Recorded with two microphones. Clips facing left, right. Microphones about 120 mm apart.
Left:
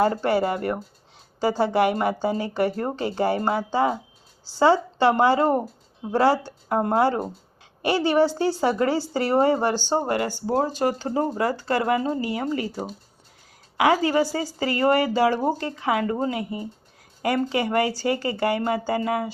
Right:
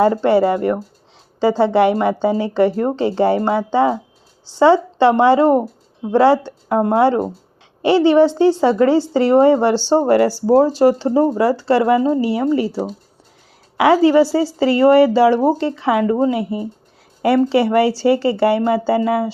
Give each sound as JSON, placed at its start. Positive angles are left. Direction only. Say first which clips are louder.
{"t": 0.0, "sound": "a woman's voice", "louder": "right 7 dB", "side_deg": -25}
{"t": 13.7, "sound": "a woman's voice", "louder": "right 8 dB", "side_deg": -30}